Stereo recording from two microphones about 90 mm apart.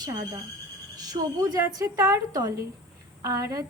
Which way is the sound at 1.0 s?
50° right (ahead or behind).